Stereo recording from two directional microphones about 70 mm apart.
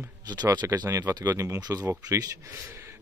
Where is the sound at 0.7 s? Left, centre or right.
Right.